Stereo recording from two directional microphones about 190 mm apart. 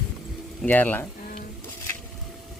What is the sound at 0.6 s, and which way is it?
Speech, 10° left (ahead or behind).